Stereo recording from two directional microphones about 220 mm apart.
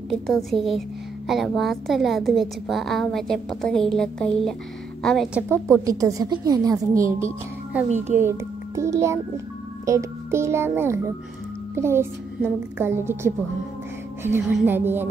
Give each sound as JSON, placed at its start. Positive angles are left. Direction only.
{"t": 0.1, "sound": "a woman's voice", "side_deg": 0}
{"t": 5.5, "sound": "a woman's voice", "side_deg": -15}